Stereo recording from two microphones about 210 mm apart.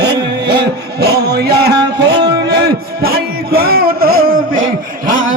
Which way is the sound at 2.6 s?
45° right (ahead or behind).